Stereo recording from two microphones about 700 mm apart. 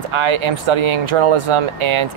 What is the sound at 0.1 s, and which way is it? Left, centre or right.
Speech, right.